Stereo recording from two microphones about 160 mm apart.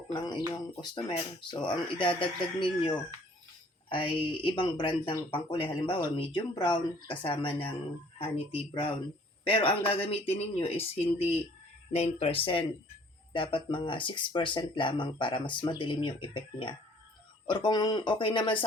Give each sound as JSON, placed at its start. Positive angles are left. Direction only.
{"t": 0.1, "sound": "speech", "side_deg": 25}